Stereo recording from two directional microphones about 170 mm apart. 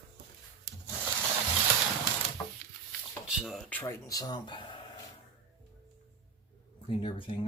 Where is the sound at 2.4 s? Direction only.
20° left (ahead or behind).